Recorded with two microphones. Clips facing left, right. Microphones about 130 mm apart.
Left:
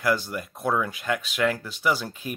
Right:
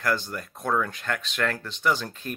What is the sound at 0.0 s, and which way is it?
Speech, 10° left (ahead or behind).